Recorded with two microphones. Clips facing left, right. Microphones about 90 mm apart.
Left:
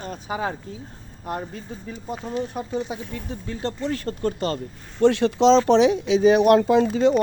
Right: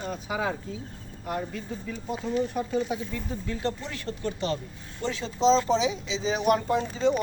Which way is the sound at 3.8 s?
45° left (ahead or behind).